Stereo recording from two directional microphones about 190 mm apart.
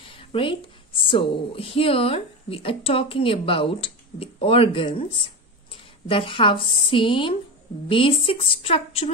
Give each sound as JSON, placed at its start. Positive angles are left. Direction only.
{"t": 0.0, "sound": "a woman's voice", "side_deg": 30}